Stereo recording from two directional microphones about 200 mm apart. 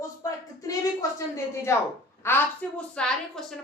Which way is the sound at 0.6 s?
15° left (ahead or behind).